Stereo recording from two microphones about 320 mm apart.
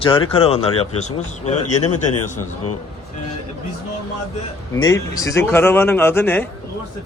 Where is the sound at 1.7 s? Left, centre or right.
Left.